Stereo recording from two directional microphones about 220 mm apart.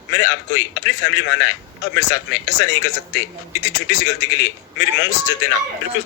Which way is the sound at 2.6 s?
55° left (ahead or behind).